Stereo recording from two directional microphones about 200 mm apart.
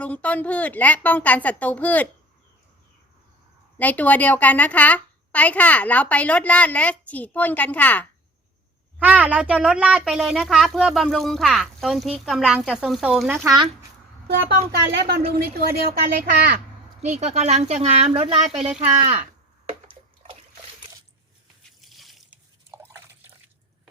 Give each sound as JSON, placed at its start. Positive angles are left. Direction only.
{"t": 0.0, "sound": "a woman's voice", "side_deg": 5}
{"t": 3.8, "sound": "a woman's voice", "side_deg": 10}
{"t": 9.0, "sound": "a child's voice", "side_deg": -10}
{"t": 14.3, "sound": "speech", "side_deg": -55}
{"t": 17.0, "sound": "speech", "side_deg": -35}
{"t": 21.7, "sound": "drip", "side_deg": 0}
{"t": 22.7, "sound": "drip", "side_deg": -10}